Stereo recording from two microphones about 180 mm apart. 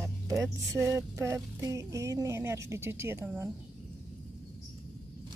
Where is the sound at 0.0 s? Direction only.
15° right (ahead or behind).